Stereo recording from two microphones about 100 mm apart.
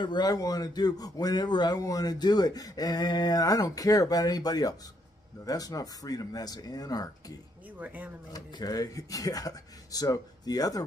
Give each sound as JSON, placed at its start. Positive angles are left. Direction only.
{"t": 0.0, "sound": "speech", "side_deg": 45}
{"t": 7.8, "sound": "speech", "side_deg": -15}
{"t": 8.3, "sound": "speech", "side_deg": 40}